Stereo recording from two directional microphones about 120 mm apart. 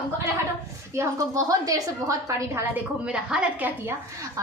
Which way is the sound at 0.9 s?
25° right (ahead or behind).